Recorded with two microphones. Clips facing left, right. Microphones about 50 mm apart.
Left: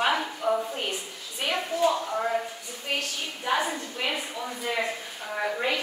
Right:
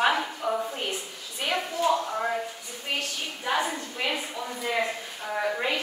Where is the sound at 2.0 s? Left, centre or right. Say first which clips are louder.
Left 1 dB; centre.